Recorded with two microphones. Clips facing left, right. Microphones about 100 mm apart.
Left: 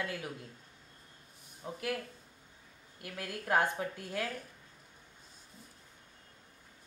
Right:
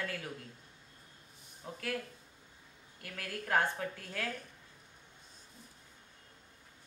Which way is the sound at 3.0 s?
15° left (ahead or behind).